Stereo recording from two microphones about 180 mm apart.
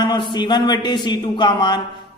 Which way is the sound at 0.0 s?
25° left (ahead or behind).